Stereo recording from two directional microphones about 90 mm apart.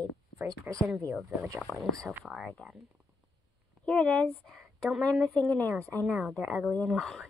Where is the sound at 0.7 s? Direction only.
20° right (ahead or behind).